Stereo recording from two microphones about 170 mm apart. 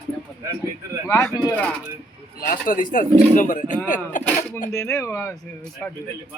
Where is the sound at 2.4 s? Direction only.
55° left (ahead or behind).